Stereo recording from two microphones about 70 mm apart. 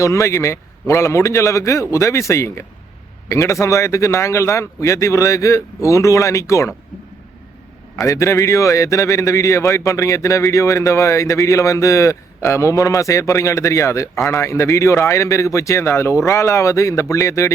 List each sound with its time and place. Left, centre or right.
0.0 s a man's voice: left
8.0 s a man's voice: left